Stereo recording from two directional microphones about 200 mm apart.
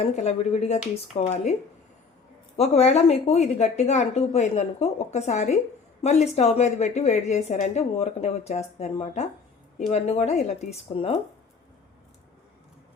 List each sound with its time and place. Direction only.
0.0 s a woman's voice: 35° left (ahead or behind)
2.6 s a woman's voice: 35° left (ahead or behind)